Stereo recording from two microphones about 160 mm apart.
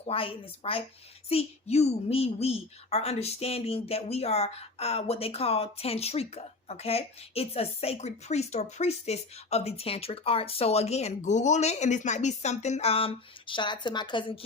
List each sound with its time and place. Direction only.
0.0 s a woman's voice: 35° left (ahead or behind)